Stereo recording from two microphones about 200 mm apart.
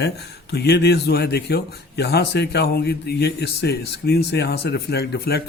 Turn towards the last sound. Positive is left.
turn(degrees=55)  # may be behind; listen again after turning